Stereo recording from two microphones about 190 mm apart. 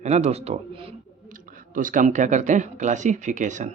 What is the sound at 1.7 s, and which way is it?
Speech, 45° right (ahead or behind).